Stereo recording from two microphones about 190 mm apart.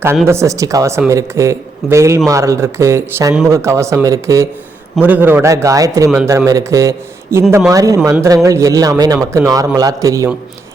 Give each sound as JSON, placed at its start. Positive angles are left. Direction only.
{"t": 0.3, "sound": "speech", "side_deg": -15}